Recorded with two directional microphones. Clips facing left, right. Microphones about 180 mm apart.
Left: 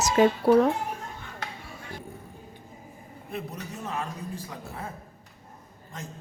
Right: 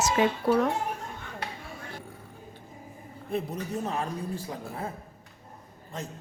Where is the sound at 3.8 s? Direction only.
35° right (ahead or behind).